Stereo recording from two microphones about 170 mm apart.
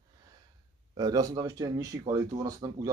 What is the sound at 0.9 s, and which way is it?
Speech, 20° right (ahead or behind).